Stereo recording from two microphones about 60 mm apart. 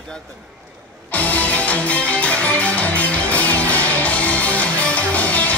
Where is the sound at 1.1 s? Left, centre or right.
Left.